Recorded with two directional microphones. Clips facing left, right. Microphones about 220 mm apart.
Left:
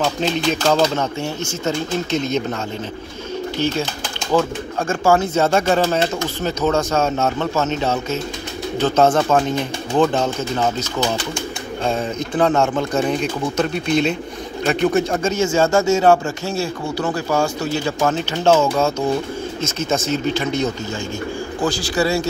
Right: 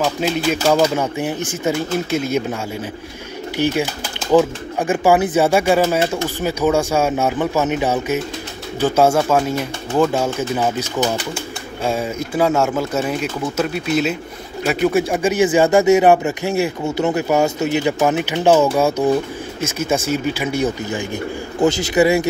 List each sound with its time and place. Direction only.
0.0 s speech: 5° right (ahead or behind)
3.5 s speech: 15° right (ahead or behind)
21.5 s a man's voice: 20° right (ahead or behind)